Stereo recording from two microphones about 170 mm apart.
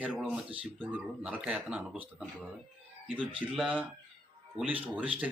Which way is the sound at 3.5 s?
Centre (ahead or behind).